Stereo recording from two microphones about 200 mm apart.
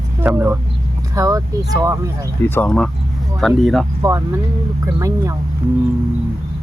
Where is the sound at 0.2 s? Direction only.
10° right (ahead or behind).